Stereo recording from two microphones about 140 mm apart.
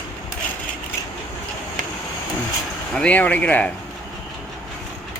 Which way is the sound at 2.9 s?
10° left (ahead or behind).